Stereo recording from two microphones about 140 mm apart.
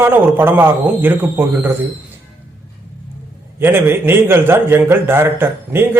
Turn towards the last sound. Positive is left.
turn(degrees=-15)  # may be behind; listen again after turning